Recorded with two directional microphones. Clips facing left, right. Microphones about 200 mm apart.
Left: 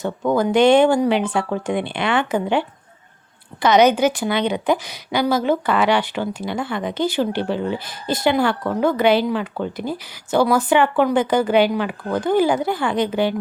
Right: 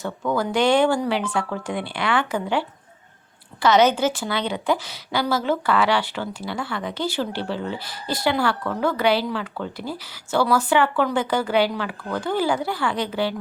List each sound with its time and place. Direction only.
0.0 s a woman's voice: 20° left (ahead or behind)